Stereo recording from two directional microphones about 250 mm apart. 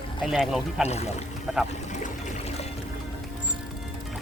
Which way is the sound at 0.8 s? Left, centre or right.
Left.